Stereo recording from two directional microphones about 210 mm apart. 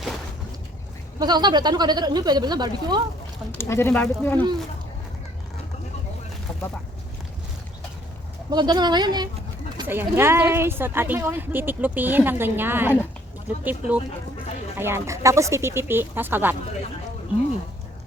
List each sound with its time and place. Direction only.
1.2 s speech: 20° right (ahead or behind)
3.6 s speech: 10° left (ahead or behind)
6.5 s boat: 10° left (ahead or behind)
8.4 s speech: 20° right (ahead or behind)
9.8 s a woman's voice: 10° right (ahead or behind)